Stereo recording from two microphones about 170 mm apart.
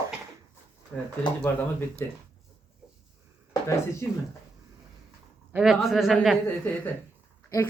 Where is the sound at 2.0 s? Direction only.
15° left (ahead or behind).